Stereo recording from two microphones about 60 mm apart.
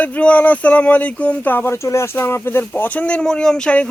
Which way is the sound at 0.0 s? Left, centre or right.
Left.